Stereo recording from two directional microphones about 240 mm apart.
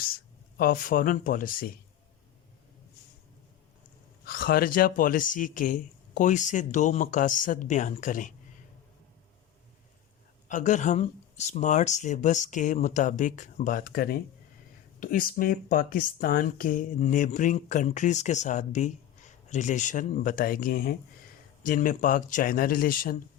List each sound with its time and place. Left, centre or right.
0.1 s speech: left
4.3 s speech: left
10.5 s speech: left